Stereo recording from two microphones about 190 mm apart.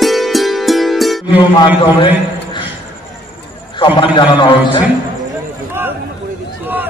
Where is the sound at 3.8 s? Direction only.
25° left (ahead or behind).